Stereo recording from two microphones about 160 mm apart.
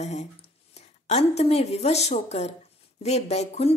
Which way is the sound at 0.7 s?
45° left (ahead or behind).